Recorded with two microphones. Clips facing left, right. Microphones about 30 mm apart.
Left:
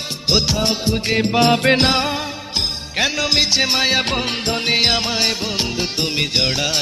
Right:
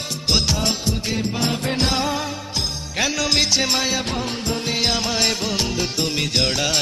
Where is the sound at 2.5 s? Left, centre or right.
Left.